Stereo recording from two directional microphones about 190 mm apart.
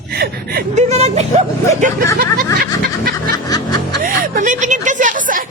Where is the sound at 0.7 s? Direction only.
35° right (ahead or behind).